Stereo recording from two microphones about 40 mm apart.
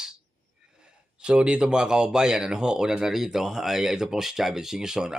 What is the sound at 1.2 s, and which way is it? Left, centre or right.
Speech, right.